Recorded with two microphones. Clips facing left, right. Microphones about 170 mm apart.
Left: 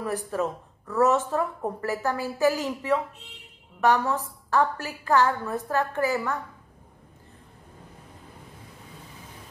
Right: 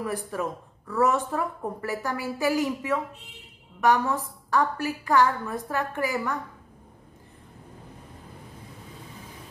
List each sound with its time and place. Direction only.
0.0 s a woman's voice: 10° right (ahead or behind)